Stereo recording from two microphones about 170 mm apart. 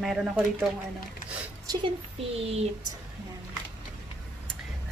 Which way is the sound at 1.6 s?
30° right (ahead or behind).